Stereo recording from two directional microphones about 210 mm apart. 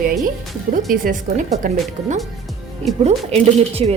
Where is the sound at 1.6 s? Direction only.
40° right (ahead or behind).